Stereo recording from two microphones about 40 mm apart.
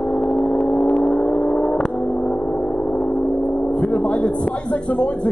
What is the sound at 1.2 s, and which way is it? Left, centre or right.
Vehicle, centre.